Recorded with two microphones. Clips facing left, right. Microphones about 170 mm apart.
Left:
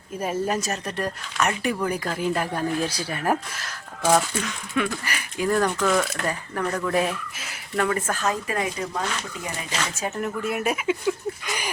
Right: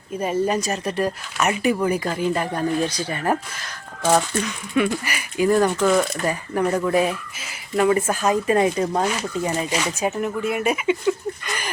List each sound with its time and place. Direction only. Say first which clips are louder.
0.2 s speech: right 4 dB; centre (ahead or behind)
4.1 s speech: right 2 dB; 10° right (ahead or behind)
6.5 s speech: right 7 dB; 25° right (ahead or behind)
6.9 s speech: right 4 dB; centre (ahead or behind)
8.4 s speech: right 9 dB; 30° right (ahead or behind)
9.7 s speech: right 6 dB; 15° right (ahead or behind)
10.2 s speech: right 3 dB; centre (ahead or behind)